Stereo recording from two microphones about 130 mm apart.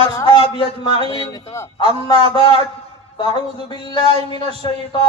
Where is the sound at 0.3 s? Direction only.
40° left (ahead or behind); by 1.7 s 20° left (ahead or behind).